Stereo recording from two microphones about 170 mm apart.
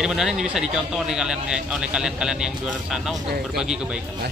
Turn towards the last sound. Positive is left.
turn(degrees=-5)  # may be behind; listen again after turning